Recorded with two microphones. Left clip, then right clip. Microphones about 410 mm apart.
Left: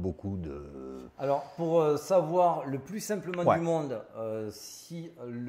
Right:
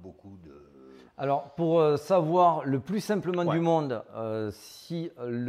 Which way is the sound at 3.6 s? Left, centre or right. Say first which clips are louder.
Right 4 dB; right.